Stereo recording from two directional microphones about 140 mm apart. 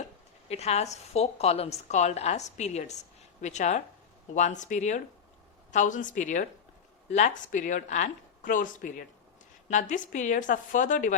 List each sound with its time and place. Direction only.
0.4 s a woman's voice: 50° left (ahead or behind); by 11.1 s 65° left (ahead or behind)